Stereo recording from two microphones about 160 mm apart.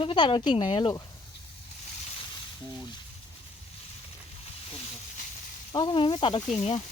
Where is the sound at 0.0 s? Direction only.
30° left (ahead or behind).